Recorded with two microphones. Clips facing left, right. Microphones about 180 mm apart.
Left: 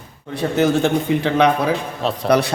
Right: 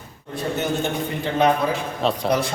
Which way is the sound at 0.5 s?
85° left.